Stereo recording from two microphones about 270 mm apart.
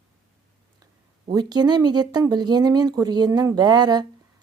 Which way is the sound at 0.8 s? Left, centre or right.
Centre.